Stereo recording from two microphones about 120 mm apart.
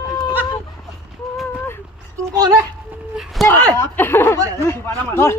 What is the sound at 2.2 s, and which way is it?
Speech, 30° right (ahead or behind).